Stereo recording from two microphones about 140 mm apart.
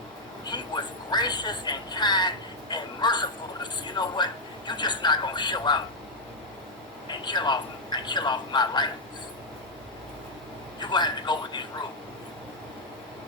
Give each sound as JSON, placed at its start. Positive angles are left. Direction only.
{"t": 0.5, "sound": "a sound", "side_deg": 30}
{"t": 7.1, "sound": "a man's voice", "side_deg": 30}
{"t": 10.8, "sound": "a man's voice", "side_deg": 30}